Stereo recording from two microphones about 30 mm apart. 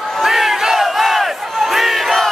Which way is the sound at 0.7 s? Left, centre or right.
Centre.